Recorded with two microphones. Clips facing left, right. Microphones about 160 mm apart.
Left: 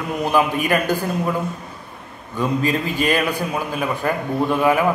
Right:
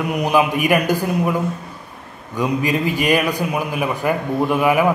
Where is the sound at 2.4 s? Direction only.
15° right (ahead or behind).